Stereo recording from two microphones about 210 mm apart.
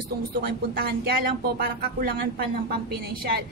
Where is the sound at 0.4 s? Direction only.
45° right (ahead or behind).